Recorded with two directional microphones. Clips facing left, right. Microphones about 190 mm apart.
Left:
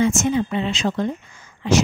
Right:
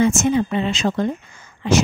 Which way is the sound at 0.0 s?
50° right (ahead or behind).